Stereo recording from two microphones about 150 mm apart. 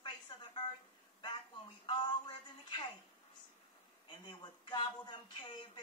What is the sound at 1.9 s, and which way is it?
Music, 30° left (ahead or behind).